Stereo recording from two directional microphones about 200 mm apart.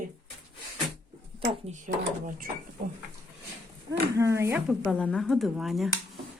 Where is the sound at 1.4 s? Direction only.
35° right (ahead or behind).